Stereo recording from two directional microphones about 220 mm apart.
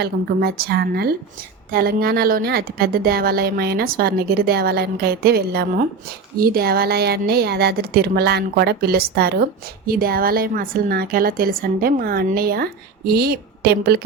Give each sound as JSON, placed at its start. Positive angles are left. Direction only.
{"t": 0.0, "sound": "speech", "side_deg": -45}